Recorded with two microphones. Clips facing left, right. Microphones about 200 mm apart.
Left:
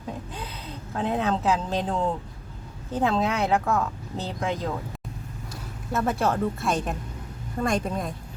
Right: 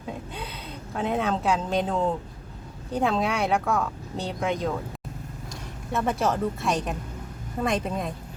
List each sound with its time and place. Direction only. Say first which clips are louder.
0.9 s speech: even; centre (ahead or behind)
5.9 s speech: even; centre (ahead or behind)